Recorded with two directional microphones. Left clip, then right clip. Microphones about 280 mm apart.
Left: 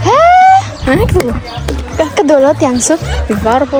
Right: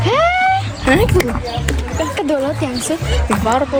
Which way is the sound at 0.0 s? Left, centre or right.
Centre.